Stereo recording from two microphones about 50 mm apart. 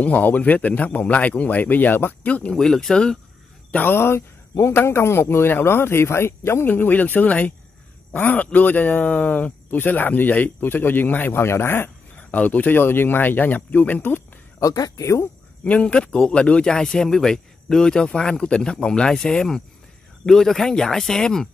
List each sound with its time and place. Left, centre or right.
0.0 s speech: left
2.2 s speech: left
2.5 s speech: centre
3.9 s speech: left
6.7 s speech: left
11.4 s speech: left
12.3 s speech: left
14.6 s speech: left
15.6 s speech: left; by 21.5 s centre